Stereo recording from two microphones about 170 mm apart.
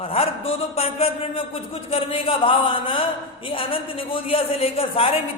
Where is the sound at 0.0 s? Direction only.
35° left (ahead or behind).